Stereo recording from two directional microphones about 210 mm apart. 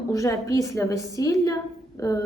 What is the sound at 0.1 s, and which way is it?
A woman's voice, 15° left (ahead or behind).